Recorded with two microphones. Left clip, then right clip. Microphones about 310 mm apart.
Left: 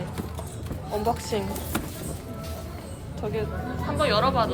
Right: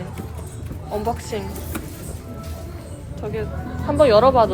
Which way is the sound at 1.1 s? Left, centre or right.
Centre.